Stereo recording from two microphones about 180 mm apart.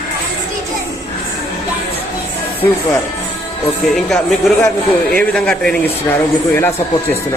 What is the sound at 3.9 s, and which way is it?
Speech, centre (ahead or behind).